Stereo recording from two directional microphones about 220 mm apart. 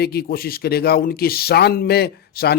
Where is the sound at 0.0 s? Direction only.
45° left (ahead or behind).